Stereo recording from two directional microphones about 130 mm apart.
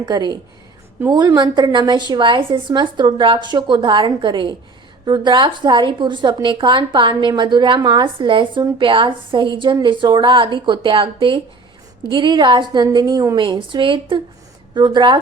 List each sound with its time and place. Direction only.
0.0 s a woman's voice: 35° right (ahead or behind)